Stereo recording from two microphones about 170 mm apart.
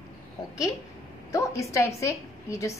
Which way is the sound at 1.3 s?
20° left (ahead or behind).